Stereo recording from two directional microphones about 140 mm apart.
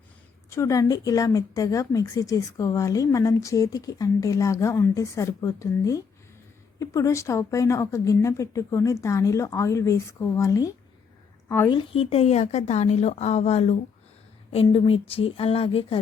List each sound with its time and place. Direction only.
0.5 s a woman's voice: 20° left (ahead or behind)
11.7 s speech: 40° left (ahead or behind)